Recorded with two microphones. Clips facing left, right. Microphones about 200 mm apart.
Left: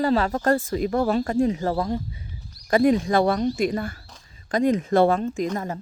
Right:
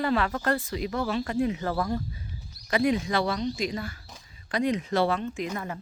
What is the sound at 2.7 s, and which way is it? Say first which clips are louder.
Speech: left 6 dB; 45° left (ahead or behind).